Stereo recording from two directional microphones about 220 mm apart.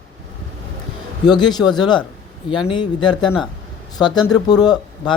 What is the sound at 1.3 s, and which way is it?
Speech, 20° left (ahead or behind).